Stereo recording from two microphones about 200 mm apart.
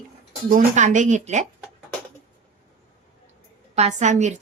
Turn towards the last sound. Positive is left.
turn(degrees=-35)  # may be behind; listen again after turning